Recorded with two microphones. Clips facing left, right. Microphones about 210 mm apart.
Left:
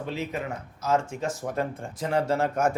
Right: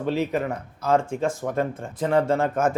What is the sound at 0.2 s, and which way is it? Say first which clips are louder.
Speech: right 7 dB; 60° right (ahead or behind).